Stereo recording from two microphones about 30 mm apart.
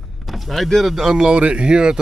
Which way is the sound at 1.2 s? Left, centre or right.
Right.